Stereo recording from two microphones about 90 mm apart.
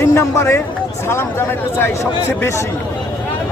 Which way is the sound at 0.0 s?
30° left (ahead or behind).